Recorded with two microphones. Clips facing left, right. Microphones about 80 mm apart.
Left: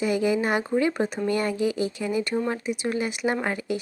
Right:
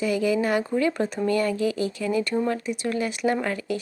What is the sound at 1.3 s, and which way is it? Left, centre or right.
Speech, left.